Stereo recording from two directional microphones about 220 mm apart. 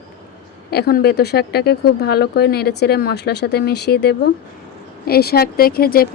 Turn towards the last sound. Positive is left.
turn(degrees=45)  # may be behind; listen again after turning